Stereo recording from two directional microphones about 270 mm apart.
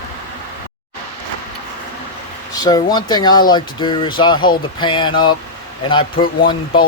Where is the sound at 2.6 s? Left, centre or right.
Centre.